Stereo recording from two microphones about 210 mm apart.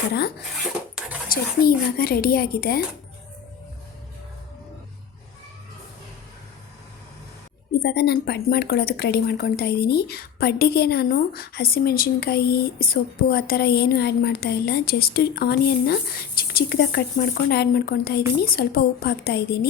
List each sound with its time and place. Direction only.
0.1 s a woman's voice: 50° left (ahead or behind)
7.8 s a woman's voice: 50° left (ahead or behind)